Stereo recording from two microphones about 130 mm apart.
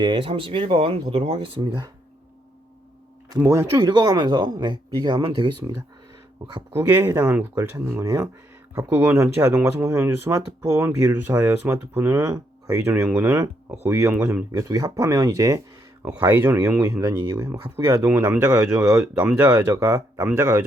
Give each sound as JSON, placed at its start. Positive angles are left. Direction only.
{"t": 0.0, "sound": "speech", "side_deg": -40}
{"t": 3.3, "sound": "speech", "side_deg": -20}
{"t": 6.7, "sound": "speech", "side_deg": -15}
{"t": 14.7, "sound": "speech", "side_deg": -30}
{"t": 18.6, "sound": "speech", "side_deg": -5}
{"t": 19.4, "sound": "speech", "side_deg": -30}